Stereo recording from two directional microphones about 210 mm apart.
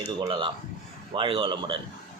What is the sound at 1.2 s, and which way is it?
Speech, 25° right (ahead or behind).